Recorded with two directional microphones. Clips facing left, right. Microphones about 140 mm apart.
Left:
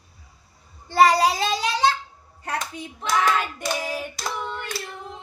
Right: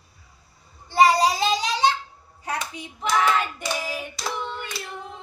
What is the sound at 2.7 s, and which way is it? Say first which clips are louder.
Hands: left 2 dB; 50° left (ahead or behind).